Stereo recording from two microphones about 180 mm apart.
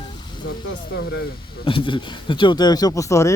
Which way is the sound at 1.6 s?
30° left (ahead or behind).